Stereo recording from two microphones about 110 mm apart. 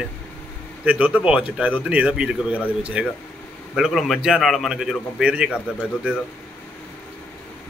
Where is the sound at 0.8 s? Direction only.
10° right (ahead or behind).